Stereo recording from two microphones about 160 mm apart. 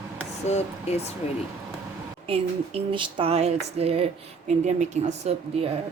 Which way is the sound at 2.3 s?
35° right (ahead or behind).